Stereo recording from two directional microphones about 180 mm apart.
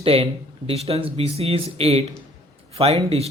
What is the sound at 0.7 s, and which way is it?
A man's voice, 35° right (ahead or behind).